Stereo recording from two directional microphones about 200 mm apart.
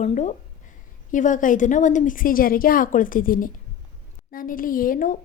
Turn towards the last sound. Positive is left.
turn(degrees=40)  # may be behind; listen again after turning